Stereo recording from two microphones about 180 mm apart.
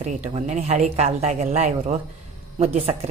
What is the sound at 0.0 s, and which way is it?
A woman's voice, 40° right (ahead or behind).